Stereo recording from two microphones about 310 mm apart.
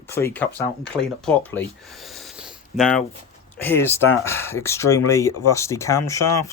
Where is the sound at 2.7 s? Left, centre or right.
Centre.